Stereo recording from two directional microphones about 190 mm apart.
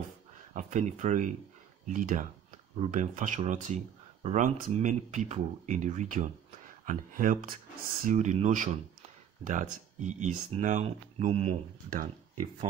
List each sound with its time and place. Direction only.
0.5 s speech: 40° right (ahead or behind)